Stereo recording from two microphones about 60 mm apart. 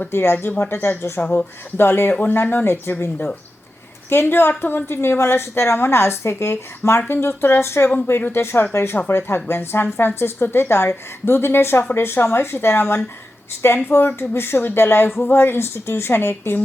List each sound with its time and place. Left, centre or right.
0.0 s a woman's voice: left